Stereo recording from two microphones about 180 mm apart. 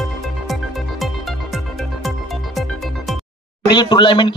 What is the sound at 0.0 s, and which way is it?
Music, centre (ahead or behind).